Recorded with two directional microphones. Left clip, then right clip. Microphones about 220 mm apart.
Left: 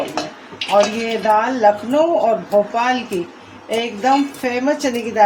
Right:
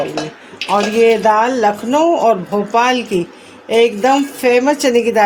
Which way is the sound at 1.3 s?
45° right (ahead or behind).